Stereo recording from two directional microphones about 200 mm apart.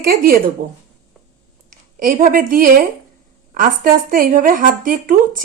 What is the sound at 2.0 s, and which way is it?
A woman's voice, 45° right (ahead or behind).